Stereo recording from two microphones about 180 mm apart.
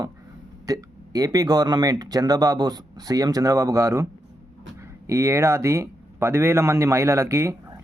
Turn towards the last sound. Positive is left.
turn(degrees=-15)  # may be behind; listen again after turning